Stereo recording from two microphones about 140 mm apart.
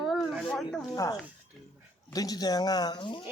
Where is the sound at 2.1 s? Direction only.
25° left (ahead or behind).